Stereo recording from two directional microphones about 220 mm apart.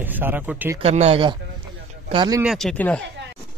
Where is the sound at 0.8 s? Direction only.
30° right (ahead or behind).